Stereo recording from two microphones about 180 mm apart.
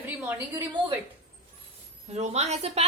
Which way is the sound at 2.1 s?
40° right (ahead or behind).